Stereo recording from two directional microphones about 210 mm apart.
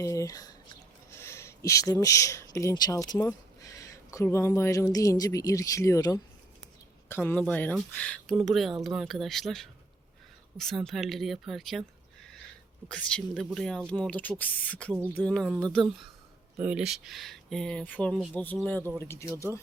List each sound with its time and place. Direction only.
0.0 s speech: 15° left (ahead or behind)
12.9 s speech: 5° left (ahead or behind)
16.6 s speech: 5° right (ahead or behind); by 19.3 s 10° left (ahead or behind)